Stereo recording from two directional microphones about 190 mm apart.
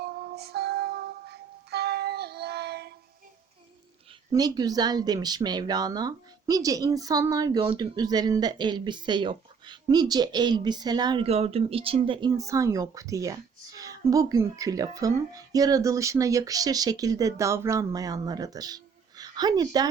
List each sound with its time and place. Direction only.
0.0 s music: 55° right (ahead or behind)
4.3 s speech: 20° right (ahead or behind)
12.3 s speech: 15° right (ahead or behind)